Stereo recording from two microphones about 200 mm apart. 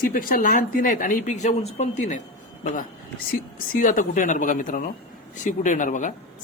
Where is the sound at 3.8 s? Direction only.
40° left (ahead or behind).